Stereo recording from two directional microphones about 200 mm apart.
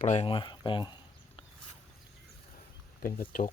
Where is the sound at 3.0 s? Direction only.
45° left (ahead or behind).